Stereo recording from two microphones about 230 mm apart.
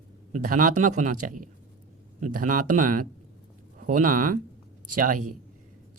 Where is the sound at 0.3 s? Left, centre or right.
Right.